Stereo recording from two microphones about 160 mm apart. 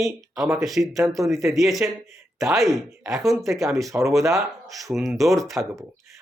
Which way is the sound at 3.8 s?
20° right (ahead or behind).